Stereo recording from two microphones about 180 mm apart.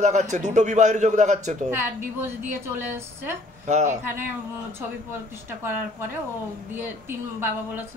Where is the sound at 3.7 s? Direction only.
40° right (ahead or behind).